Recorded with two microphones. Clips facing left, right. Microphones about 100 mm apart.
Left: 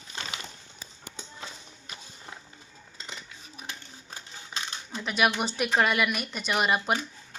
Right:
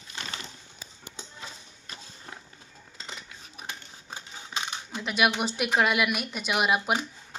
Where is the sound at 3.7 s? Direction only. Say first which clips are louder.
Right 3 dB; 20° right (ahead or behind).